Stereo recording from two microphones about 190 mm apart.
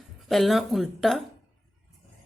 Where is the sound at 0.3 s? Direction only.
Centre (ahead or behind).